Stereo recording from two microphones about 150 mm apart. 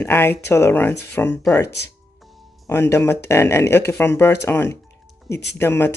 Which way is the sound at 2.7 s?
15° left (ahead or behind).